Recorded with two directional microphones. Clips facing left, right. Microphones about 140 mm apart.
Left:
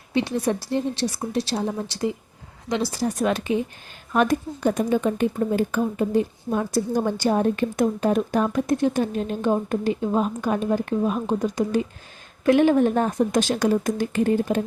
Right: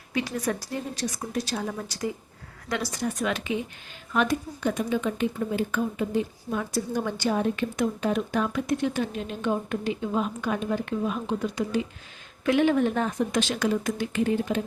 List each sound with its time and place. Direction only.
0.1 s a woman's voice: 25° left (ahead or behind); by 14.6 s 45° left (ahead or behind)